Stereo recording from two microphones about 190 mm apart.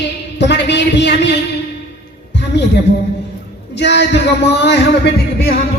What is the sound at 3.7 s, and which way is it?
Speech, 65° left (ahead or behind).